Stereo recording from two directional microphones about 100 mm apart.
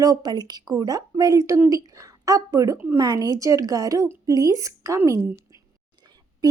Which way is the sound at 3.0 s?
40° right (ahead or behind).